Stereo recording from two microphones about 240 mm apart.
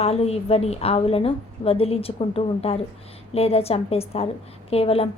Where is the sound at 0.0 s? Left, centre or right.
Left.